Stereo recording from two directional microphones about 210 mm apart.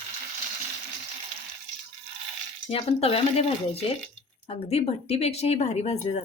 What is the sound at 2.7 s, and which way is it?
Speech, 30° left (ahead or behind).